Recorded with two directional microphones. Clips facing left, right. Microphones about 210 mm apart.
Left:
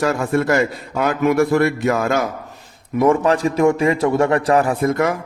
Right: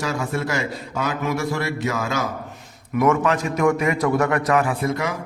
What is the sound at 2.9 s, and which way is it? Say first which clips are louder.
A man's voice: left 4 dB; 30° left (ahead or behind).